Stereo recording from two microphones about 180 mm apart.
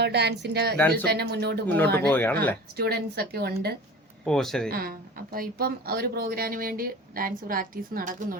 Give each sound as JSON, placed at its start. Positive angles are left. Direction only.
{"t": 0.0, "sound": "speech", "side_deg": -70}
{"t": 1.6, "sound": "speech", "side_deg": 10}
{"t": 2.7, "sound": "speech", "side_deg": -60}
{"t": 4.3, "sound": "speech", "side_deg": 5}
{"t": 4.7, "sound": "speech", "side_deg": -55}